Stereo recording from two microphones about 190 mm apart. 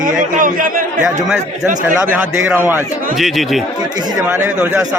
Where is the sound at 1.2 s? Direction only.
Centre (ahead or behind).